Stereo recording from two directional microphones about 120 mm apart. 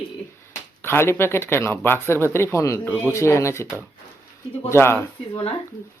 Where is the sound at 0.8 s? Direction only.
20° left (ahead or behind).